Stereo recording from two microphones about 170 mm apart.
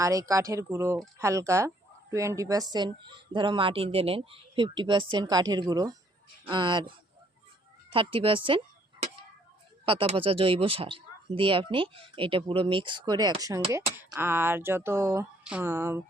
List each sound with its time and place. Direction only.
0.0 s speech: 20° right (ahead or behind)
7.9 s speech: 30° right (ahead or behind); by 16.0 s 15° right (ahead or behind)